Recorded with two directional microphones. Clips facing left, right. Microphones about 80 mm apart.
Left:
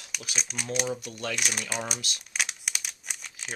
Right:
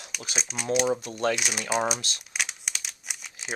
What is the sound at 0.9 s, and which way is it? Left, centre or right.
Speech, right.